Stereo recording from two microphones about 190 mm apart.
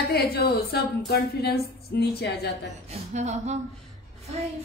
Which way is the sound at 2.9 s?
35° right (ahead or behind).